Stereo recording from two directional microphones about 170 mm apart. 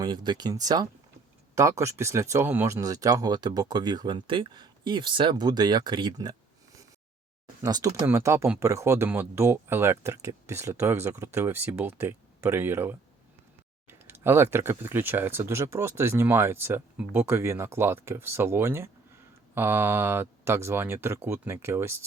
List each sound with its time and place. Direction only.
0.0 s speech: 25° right (ahead or behind)
7.6 s speech: 20° right (ahead or behind)
13.8 s typing: 10° right (ahead or behind)
14.8 s speech: 10° right (ahead or behind)